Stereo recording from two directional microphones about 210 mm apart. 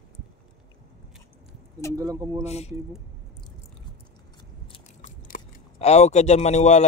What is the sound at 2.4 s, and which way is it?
Speech, 30° left (ahead or behind).